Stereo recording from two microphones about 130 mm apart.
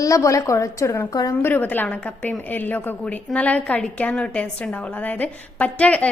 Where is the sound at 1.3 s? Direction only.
15° left (ahead or behind).